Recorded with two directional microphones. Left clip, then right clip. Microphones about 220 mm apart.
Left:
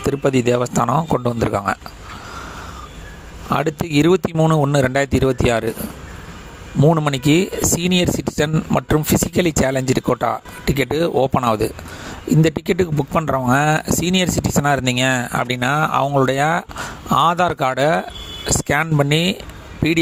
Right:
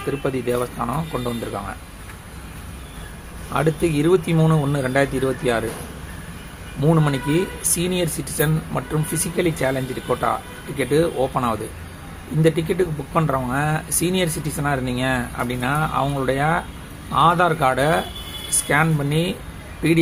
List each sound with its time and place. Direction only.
0.2 s speech: 50° left (ahead or behind)
3.5 s speech: 45° left (ahead or behind)
6.8 s speech: 45° left (ahead or behind)